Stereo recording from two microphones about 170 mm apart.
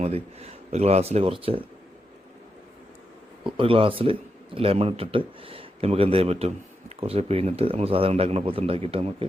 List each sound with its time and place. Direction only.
0.0 s speech: 35° right (ahead or behind)
3.4 s speech: 30° right (ahead or behind)